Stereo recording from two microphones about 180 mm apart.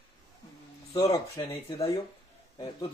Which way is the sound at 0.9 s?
20° left (ahead or behind).